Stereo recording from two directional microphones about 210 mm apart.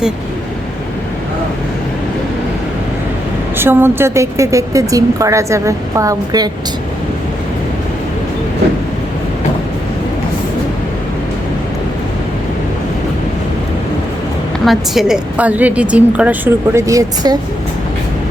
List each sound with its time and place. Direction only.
3.6 s a woman's voice: 10° right (ahead or behind)
14.6 s a woman's voice: centre (ahead or behind)